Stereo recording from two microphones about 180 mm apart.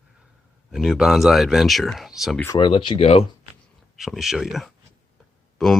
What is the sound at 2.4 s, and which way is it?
Speech, 20° left (ahead or behind).